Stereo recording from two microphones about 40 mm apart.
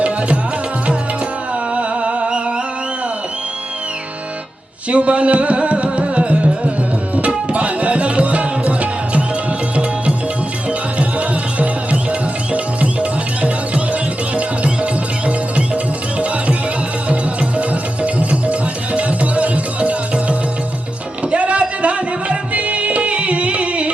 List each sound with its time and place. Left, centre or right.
1.7 s music: right
4.9 s music: right
11.2 s music: right
17.6 s music: right
21.2 s music: right